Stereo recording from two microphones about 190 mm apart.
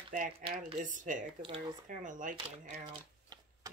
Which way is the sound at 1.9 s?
40° right (ahead or behind).